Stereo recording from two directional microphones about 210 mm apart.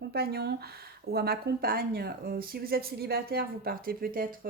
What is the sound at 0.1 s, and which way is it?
Speech, 50° right (ahead or behind).